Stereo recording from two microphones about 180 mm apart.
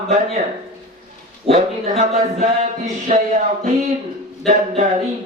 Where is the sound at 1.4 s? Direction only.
35° right (ahead or behind).